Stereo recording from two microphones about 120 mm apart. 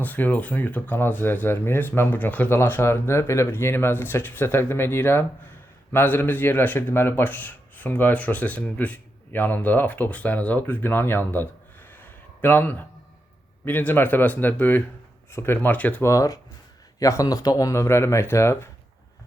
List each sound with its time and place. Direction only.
0.0 s speech: 15° left (ahead or behind)
11.9 s a sound: 15° left (ahead or behind)
13.7 s speech: 15° left (ahead or behind)
16.0 s speech: 25° left (ahead or behind)